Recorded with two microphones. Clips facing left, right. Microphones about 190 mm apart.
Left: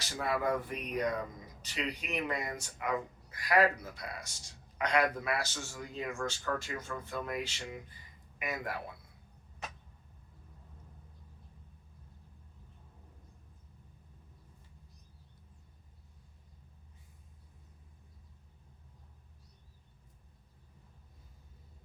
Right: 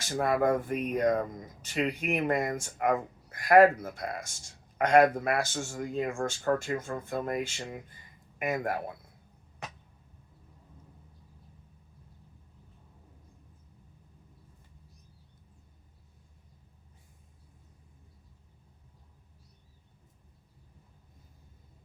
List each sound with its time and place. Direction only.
0.0 s speech: 45° right (ahead or behind)